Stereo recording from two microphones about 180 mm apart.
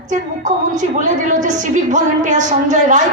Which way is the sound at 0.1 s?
45° right (ahead or behind).